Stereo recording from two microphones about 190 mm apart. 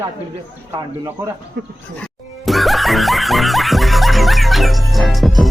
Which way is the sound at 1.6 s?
65° right (ahead or behind).